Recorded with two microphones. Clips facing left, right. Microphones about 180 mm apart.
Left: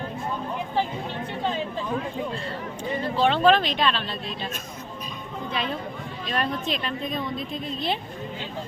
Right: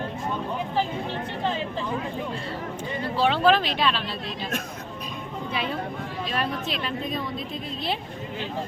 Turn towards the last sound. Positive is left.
turn(degrees=0)  # may be behind; listen again after turning